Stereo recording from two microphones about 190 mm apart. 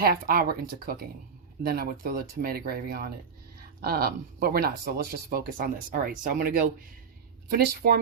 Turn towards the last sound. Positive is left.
turn(degrees=-55)  # may be behind; listen again after turning